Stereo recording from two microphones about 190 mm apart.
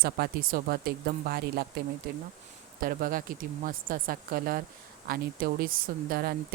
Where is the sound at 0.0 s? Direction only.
50° right (ahead or behind).